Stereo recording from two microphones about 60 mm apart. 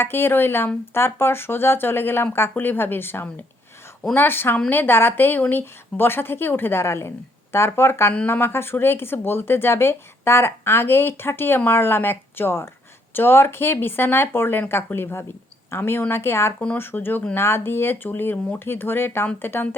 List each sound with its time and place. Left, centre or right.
0.0 s speech: left